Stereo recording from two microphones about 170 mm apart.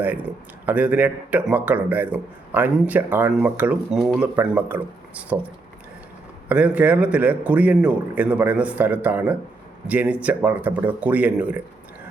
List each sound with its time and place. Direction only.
0.0 s speech: 10° right (ahead or behind)
6.5 s speech: 10° right (ahead or behind)